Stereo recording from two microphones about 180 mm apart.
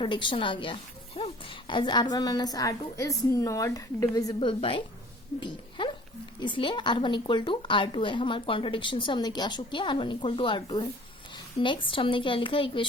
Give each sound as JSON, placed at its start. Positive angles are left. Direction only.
{"t": 0.0, "sound": "a woman's voice", "side_deg": 25}
{"t": 5.5, "sound": "a sound", "side_deg": 25}
{"t": 6.4, "sound": "a woman's voice", "side_deg": 25}